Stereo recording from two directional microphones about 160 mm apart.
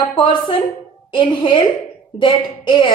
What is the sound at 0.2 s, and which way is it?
A woman's voice, 35° left (ahead or behind).